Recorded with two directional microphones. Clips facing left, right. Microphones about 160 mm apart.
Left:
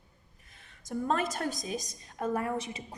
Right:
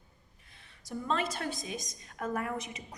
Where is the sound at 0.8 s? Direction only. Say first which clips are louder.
Left 3 dB; 45° left (ahead or behind).